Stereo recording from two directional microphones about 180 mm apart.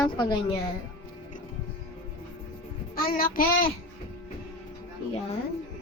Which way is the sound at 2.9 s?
55° left (ahead or behind).